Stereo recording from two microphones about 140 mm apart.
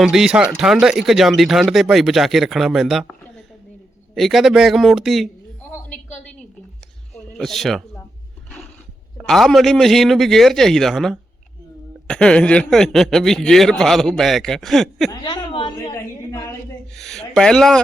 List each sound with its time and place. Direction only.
0.0 s a man's voice: 5° right (ahead or behind)
7.3 s a man's voice: centre (ahead or behind)
9.1 s a man's voice: centre (ahead or behind)
15.2 s a woman's voice: 35° left (ahead or behind)
16.9 s a man's voice: 5° left (ahead or behind)